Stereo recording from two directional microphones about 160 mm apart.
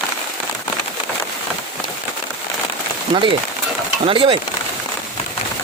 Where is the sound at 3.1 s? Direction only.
30° right (ahead or behind).